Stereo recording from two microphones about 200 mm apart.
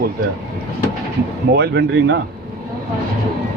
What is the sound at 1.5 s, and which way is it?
Speech, 55° right (ahead or behind).